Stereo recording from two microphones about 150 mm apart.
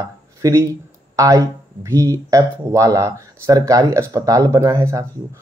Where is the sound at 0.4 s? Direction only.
20° right (ahead or behind).